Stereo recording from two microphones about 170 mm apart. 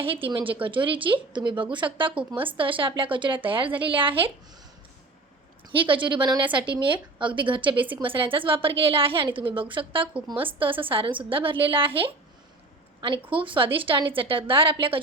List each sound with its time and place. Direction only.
0.0 s a woman's voice: 30° right (ahead or behind)
5.7 s a woman's voice: 30° right (ahead or behind)
13.3 s a woman's voice: 30° right (ahead or behind)